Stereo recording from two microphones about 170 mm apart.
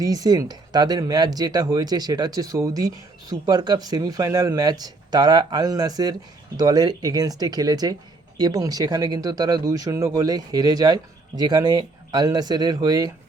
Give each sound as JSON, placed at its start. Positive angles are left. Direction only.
{"t": 0.0, "sound": "speech", "side_deg": -20}